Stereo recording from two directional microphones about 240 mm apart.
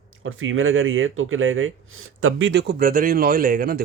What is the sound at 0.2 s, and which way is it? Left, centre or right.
Speech, right.